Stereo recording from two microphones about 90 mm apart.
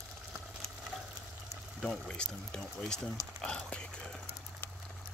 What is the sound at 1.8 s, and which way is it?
Speech, 5° left (ahead or behind).